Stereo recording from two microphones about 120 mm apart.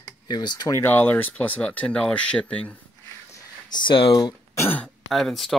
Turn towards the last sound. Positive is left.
turn(degrees=0)  # may be behind; listen again after turning